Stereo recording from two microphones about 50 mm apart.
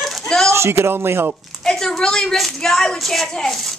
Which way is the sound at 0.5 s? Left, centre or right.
Right.